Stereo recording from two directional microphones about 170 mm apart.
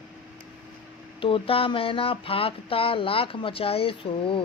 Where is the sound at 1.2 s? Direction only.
30° left (ahead or behind).